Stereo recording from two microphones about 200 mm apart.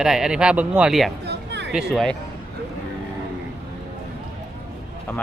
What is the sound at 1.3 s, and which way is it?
Music, 60° right (ahead or behind).